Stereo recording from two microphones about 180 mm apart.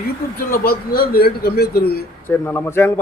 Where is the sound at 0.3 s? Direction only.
55° left (ahead or behind).